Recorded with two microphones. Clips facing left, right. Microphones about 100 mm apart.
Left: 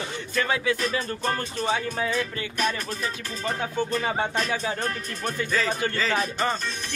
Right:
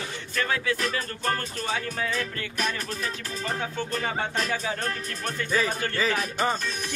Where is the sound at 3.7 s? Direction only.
15° left (ahead or behind).